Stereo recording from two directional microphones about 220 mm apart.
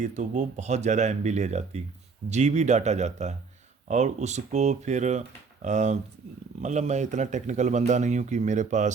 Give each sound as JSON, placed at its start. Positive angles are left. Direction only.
{"t": 0.0, "sound": "speech", "side_deg": -35}